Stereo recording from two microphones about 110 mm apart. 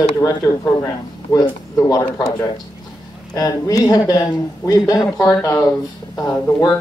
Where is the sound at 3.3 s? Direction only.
35° left (ahead or behind).